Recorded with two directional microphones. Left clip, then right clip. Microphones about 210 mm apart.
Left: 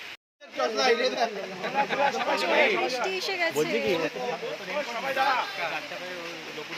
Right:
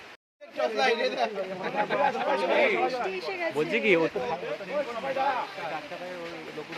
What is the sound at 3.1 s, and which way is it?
Speech, 5° left (ahead or behind).